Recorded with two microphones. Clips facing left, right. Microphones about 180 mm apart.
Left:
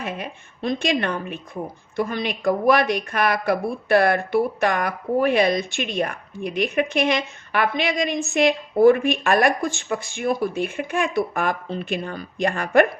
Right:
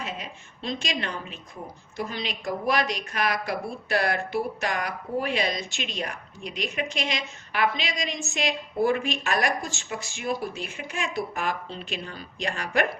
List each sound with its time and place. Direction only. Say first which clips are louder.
0.0 s a woman's voice: left 6 dB; 55° left (ahead or behind)